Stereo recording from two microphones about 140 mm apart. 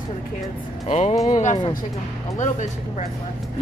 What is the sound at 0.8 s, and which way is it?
Speech, 55° left (ahead or behind).